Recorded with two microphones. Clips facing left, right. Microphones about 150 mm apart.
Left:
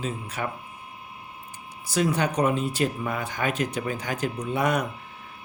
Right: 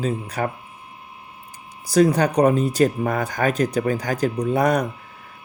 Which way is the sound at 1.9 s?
40° right (ahead or behind).